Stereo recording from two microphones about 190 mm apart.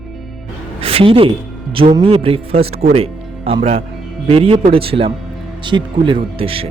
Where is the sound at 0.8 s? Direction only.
30° right (ahead or behind).